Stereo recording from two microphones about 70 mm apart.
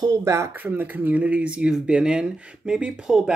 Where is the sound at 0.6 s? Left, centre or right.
Right.